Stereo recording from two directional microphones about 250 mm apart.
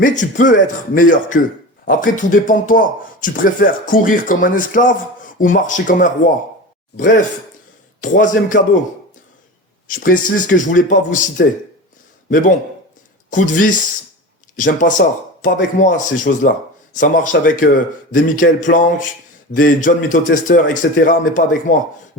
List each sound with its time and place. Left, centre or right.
0.0 s a man's voice: left
9.8 s a man's voice: left